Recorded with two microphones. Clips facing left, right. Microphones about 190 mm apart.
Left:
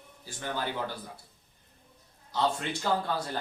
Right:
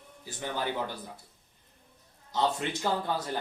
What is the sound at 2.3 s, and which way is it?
Speech, 15° right (ahead or behind).